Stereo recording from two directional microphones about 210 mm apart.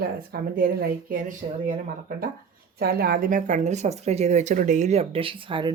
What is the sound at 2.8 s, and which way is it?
Speech, 45° right (ahead or behind).